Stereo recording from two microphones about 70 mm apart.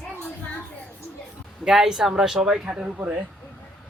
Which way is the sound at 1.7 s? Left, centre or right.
Centre.